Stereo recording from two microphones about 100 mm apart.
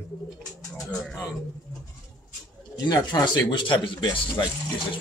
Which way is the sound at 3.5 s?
55° left (ahead or behind).